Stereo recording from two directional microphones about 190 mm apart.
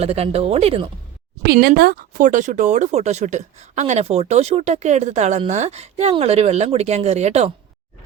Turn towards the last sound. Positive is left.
turn(degrees=-35)  # may be behind; listen again after turning